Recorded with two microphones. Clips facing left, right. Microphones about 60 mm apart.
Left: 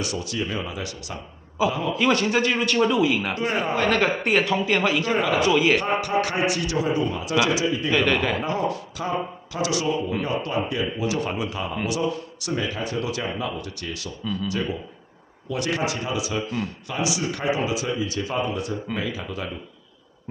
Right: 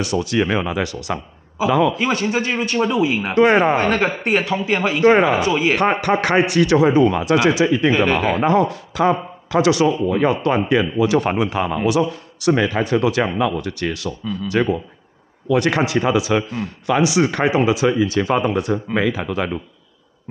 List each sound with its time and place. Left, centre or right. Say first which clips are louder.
0.0 s a man's voice: right 9 dB; right
2.0 s a man's voice: right 1 dB; centre
3.3 s speech: right 11 dB; right
3.8 s a man's voice: right 3 dB; right
5.8 s a man's voice: right 6 dB; right
7.9 s a man's voice: right 4 dB; right
8.4 s speech: right 10 dB; right
9.5 s a man's voice: right 10 dB; right
11.1 s a man's voice: right 9 dB; right
15.4 s a man's voice: right 8 dB; right
16.8 s speech: right 13 dB; right